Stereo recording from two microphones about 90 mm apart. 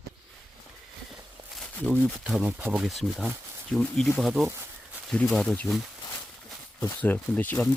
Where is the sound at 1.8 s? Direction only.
15° left (ahead or behind).